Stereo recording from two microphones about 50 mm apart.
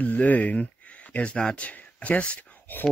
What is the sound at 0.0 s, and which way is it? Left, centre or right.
Speech, left.